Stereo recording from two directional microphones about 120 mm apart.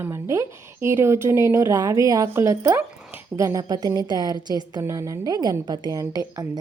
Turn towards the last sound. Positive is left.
turn(degrees=-30)  # may be behind; listen again after turning